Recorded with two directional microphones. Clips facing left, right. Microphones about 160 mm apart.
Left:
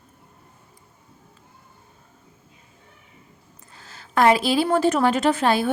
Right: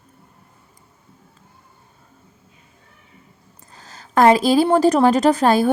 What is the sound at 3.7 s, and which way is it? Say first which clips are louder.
A woman's voice: right 3 dB; 40° right (ahead or behind).